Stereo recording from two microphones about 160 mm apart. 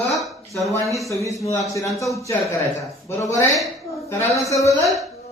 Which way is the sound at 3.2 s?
20° left (ahead or behind).